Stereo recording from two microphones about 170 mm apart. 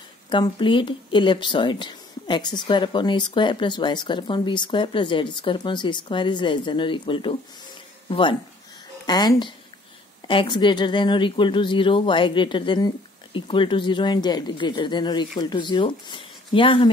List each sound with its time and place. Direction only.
0.3 s speech: 30° left (ahead or behind)